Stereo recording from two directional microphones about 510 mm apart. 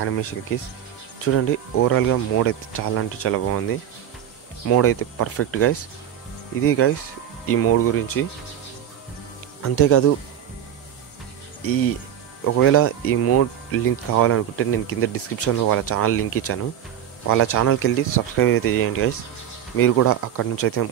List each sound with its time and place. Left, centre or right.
0.0 s speech: left
4.6 s speech: left
9.6 s speech: left
11.6 s speech: left